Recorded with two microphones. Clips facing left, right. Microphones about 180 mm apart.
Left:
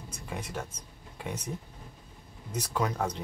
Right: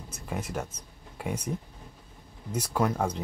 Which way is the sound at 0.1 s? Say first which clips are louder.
Right 4 dB; 5° right (ahead or behind).